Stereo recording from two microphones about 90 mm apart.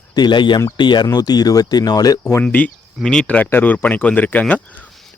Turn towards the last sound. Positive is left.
turn(degrees=15)  # may be behind; listen again after turning